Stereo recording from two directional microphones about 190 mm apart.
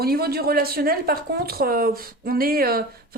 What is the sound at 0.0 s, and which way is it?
Speech, 55° right (ahead or behind).